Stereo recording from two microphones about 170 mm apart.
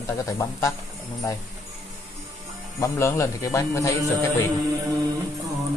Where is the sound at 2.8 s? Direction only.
15° left (ahead or behind).